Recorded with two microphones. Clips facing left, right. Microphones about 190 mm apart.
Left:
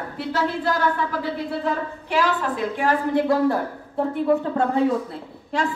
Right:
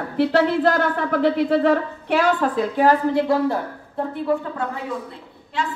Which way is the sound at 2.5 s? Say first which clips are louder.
Right 5 dB; 40° right (ahead or behind).